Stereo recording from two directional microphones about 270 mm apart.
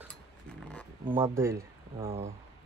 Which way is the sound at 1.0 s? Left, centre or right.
Centre.